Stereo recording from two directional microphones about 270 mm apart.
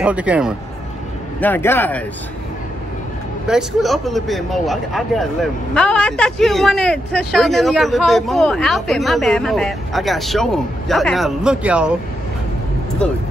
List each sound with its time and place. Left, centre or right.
0.0 s a man's voice: centre
1.4 s speech: centre
3.4 s a man's voice: centre